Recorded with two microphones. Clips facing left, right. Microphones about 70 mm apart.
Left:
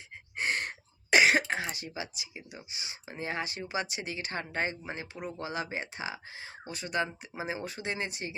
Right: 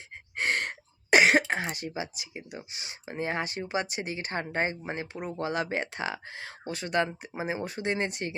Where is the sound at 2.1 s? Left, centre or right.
Right.